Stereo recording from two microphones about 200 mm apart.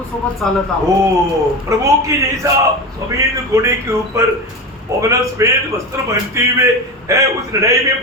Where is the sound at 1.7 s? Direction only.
15° right (ahead or behind).